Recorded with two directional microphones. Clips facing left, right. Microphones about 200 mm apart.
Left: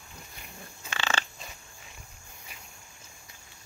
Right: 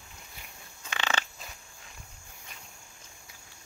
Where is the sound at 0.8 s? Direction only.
15° right (ahead or behind).